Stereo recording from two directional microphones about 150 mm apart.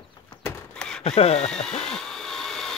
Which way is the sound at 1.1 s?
40° left (ahead or behind).